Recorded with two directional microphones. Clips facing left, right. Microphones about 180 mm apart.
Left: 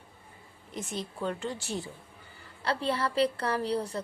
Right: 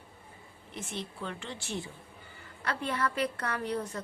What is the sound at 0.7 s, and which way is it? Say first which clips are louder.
A woman's voice: left 3 dB; 40° left (ahead or behind).